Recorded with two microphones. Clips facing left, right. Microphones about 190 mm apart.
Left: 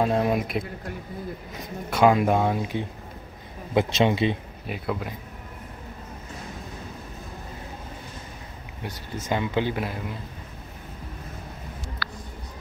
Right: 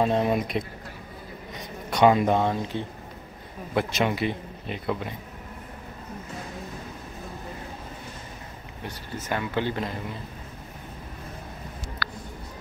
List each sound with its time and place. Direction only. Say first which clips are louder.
0.0 s a man's voice: even; centre (ahead or behind)
1.9 s speech: even; 5° left (ahead or behind)
3.7 s speech: left 4 dB; 25° left (ahead or behind)
4.6 s a man's voice: even; 5° left (ahead or behind)
8.8 s speech: left 2 dB; 15° left (ahead or behind)
12.0 s a sound: right 3 dB; 55° right (ahead or behind)